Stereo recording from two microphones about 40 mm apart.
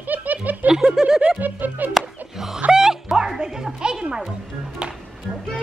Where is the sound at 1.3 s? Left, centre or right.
Right.